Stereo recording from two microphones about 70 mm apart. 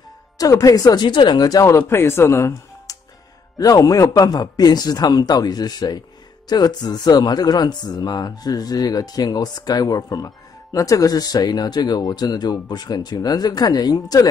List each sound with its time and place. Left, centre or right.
0.4 s speech: left
1.9 s speech: left
3.5 s speech: left
6.5 s speech: left
12.6 s speech: left